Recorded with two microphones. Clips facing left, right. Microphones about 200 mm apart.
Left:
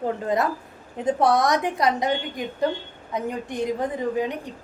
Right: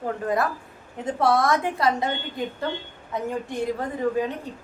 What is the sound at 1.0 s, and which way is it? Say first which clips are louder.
A woman's voice: left 1 dB; 20° left (ahead or behind).